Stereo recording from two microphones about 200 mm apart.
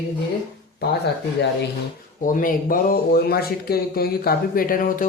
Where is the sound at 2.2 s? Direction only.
45° left (ahead or behind).